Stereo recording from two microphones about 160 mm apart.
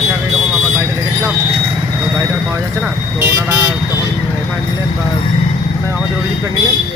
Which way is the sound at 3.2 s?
20° right (ahead or behind).